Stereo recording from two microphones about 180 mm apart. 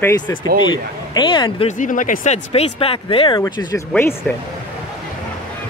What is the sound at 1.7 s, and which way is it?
Speech, 45° left (ahead or behind).